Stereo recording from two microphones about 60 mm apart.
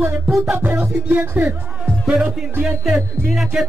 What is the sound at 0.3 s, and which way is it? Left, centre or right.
Music, centre.